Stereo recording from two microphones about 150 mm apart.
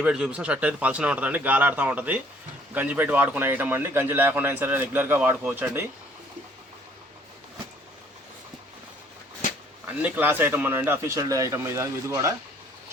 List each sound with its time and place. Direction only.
0.0 s a man's voice: 5° right (ahead or behind)
9.8 s a man's voice: 10° right (ahead or behind)